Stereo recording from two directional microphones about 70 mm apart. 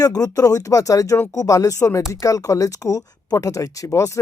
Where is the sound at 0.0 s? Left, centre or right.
Left.